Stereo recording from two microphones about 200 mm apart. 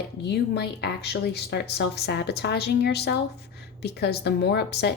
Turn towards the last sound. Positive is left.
turn(degrees=55)  # may be behind; listen again after turning